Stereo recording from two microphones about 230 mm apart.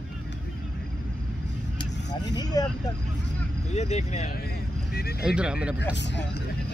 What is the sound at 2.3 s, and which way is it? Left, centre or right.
Speech, centre.